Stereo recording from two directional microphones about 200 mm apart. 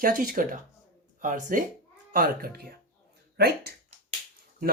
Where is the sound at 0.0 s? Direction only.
40° right (ahead or behind).